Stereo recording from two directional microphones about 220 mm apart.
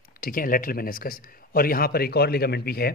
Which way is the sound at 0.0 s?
40° left (ahead or behind).